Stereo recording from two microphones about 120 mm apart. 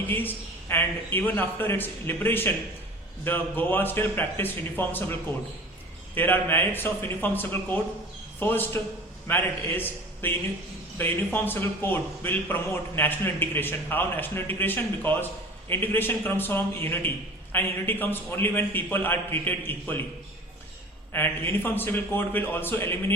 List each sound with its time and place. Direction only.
0.1 s a man's voice: 15° left (ahead or behind)
6.1 s a man's voice: 15° left (ahead or behind)
21.1 s a man's voice: 15° left (ahead or behind)